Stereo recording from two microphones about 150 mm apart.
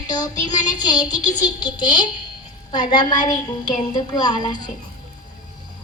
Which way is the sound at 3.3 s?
30° left (ahead or behind).